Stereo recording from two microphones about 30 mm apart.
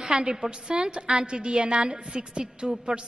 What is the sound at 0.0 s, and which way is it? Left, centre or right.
A woman's voice, right.